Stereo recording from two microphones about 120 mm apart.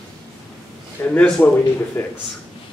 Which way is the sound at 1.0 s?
15° left (ahead or behind).